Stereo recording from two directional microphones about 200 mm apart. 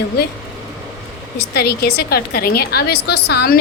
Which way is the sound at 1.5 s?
50° left (ahead or behind).